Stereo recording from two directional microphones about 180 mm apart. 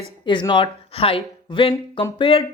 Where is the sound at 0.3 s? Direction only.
25° left (ahead or behind).